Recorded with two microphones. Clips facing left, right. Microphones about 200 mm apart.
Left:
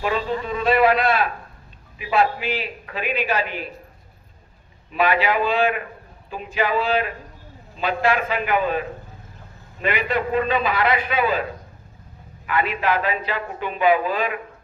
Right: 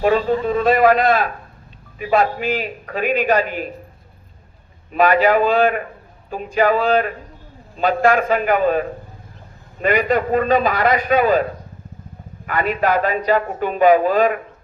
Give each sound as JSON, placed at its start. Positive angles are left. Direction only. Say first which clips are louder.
{"t": 0.0, "sound": "a man's voice", "louder": "right 7 dB", "side_deg": -45}
{"t": 4.9, "sound": "a man's voice", "louder": "right 6 dB", "side_deg": -45}
{"t": 12.5, "sound": "a man's voice", "louder": "right 3 dB", "side_deg": -45}